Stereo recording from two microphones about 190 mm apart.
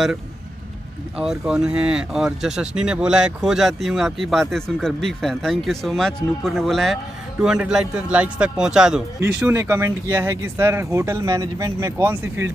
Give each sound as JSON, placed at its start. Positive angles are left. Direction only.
{"t": 1.1, "sound": "speech", "side_deg": -5}